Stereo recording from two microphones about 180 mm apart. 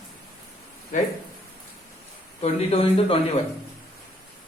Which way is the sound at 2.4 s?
35° left (ahead or behind).